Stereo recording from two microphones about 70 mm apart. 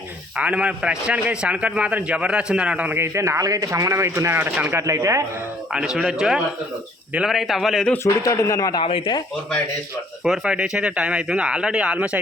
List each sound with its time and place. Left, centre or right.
0.3 s a man's voice: centre
2.9 s speech: right
5.7 s a man's voice: centre
8.0 s speech: left
8.7 s speech: left
10.2 s a man's voice: centre